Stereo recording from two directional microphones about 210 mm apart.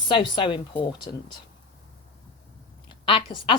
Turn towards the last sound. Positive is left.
turn(degrees=25)  # may be behind; listen again after turning